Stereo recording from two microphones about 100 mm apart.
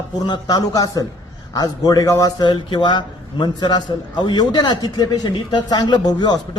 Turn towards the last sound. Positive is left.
turn(degrees=45)  # may be behind; listen again after turning